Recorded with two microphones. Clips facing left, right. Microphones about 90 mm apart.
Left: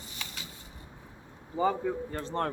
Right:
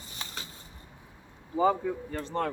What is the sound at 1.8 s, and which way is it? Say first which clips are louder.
Speech: even; 15° left (ahead or behind).